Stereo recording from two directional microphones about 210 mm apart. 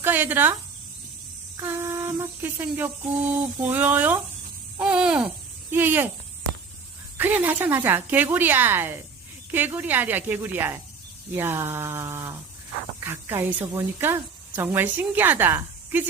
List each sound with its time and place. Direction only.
0.0 s a woman's voice: 10° right (ahead or behind)
1.5 s a woman's voice: 10° right (ahead or behind)
4.8 s hoot: 5° right (ahead or behind)
5.7 s a woman's voice: 10° right (ahead or behind)
7.2 s a woman's voice: 10° right (ahead or behind)